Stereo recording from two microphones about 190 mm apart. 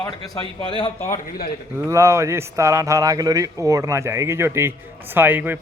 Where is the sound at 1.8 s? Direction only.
15° right (ahead or behind).